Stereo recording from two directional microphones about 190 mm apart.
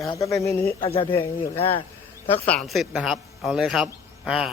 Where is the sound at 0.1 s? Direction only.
15° left (ahead or behind).